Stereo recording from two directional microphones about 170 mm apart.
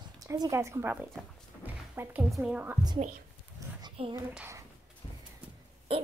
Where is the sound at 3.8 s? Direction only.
25° right (ahead or behind).